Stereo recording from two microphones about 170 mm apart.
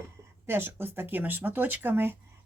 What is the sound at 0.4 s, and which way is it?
A woman's voice, 15° right (ahead or behind).